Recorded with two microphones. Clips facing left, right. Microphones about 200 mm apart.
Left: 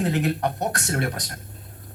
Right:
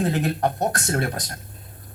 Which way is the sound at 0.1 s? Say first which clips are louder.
Right 1 dB; 40° right (ahead or behind).